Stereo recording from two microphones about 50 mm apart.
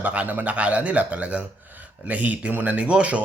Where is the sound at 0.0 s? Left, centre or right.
Right.